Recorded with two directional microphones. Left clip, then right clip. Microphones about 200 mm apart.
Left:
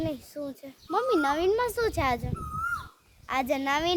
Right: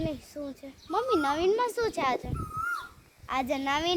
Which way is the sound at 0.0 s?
30° left (ahead or behind).